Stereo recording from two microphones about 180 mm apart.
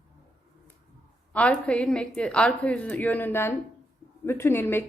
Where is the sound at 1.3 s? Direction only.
5° left (ahead or behind).